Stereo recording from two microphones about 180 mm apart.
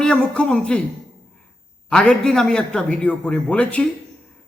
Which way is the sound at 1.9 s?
5° left (ahead or behind).